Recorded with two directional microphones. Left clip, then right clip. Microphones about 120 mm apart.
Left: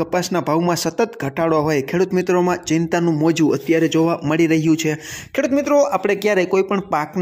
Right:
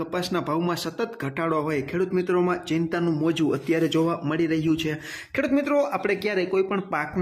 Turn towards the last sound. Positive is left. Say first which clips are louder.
# left 6 dB
turn(degrees=35)  # may be behind; listen again after turning